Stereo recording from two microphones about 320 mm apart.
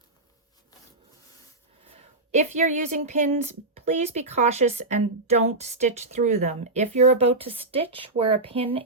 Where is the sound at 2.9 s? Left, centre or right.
Right.